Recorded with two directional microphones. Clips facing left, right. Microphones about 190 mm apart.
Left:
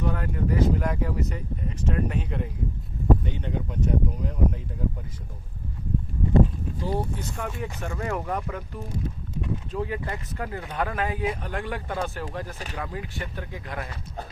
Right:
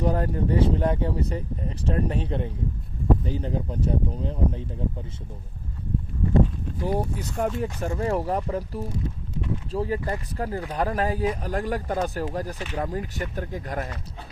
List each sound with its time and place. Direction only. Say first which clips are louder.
0.0 s speech: right 4 dB; 35° right (ahead or behind)
6.8 s speech: right 3 dB; 15° right (ahead or behind)
7.3 s speech: right 10 dB; 35° right (ahead or behind)